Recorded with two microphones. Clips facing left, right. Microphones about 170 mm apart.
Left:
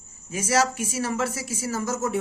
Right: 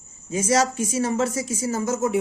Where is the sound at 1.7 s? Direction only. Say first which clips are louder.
Right 3 dB; 20° right (ahead or behind).